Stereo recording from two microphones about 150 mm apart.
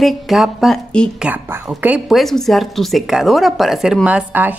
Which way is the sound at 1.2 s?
10° right (ahead or behind).